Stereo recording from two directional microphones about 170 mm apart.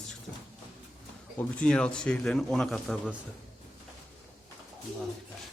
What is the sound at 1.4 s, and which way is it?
A man's voice, 5° left (ahead or behind).